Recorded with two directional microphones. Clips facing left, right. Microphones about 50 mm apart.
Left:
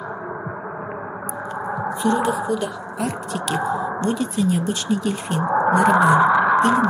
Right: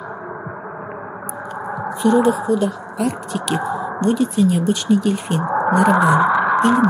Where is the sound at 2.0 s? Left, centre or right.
Centre.